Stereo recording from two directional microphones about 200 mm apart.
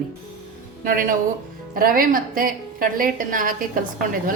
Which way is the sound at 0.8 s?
45° right (ahead or behind).